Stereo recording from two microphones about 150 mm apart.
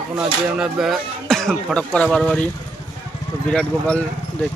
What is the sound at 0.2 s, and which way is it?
Speech, 5° right (ahead or behind).